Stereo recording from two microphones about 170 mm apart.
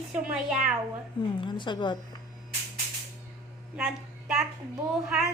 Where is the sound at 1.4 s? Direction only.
30° left (ahead or behind).